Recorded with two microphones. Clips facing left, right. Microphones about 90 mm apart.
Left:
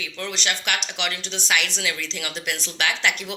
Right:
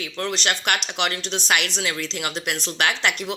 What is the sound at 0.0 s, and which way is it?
Speech, 45° right (ahead or behind).